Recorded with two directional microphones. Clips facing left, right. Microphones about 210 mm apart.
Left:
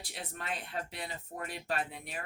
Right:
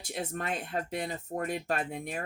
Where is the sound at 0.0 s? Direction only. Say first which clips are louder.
Right 9 dB; 45° right (ahead or behind).